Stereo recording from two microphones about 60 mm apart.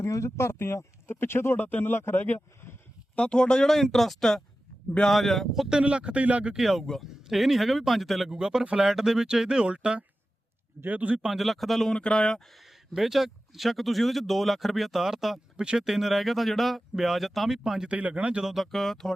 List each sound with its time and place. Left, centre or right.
0.1 s speech: left
1.5 s speech: left
3.2 s speech: centre
5.6 s speech: centre
6.6 s speech: centre; by 11.3 s right
11.3 s speech: centre
11.9 s speech: centre
12.9 s speech: centre
15.5 s speech: centre
17.6 s speech: centre
18.4 s speech: centre